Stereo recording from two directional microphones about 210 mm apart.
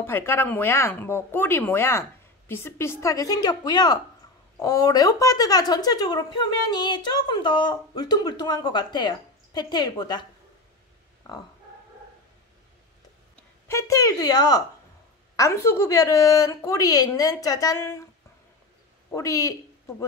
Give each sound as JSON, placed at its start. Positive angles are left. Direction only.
{"t": 0.0, "sound": "speech", "side_deg": 10}
{"t": 13.4, "sound": "speech", "side_deg": 15}
{"t": 19.0, "sound": "speech", "side_deg": 15}